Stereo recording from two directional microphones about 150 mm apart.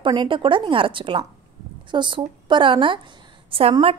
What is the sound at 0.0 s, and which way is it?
A woman's voice, 30° right (ahead or behind).